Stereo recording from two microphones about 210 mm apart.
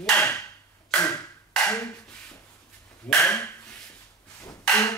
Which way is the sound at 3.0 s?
5° left (ahead or behind).